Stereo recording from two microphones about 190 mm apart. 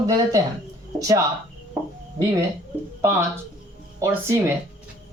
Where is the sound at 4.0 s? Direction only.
15° right (ahead or behind).